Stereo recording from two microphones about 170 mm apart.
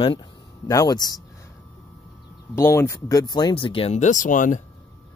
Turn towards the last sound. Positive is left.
turn(degrees=50)  # may be behind; listen again after turning